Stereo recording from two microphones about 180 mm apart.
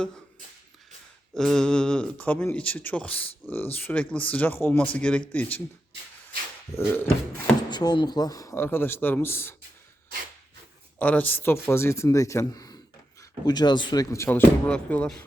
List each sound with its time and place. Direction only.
1.3 s speech: 5° left (ahead or behind)
6.7 s speech: 10° left (ahead or behind)
7.7 s speech: 25° left (ahead or behind)
11.0 s speech: 10° left (ahead or behind)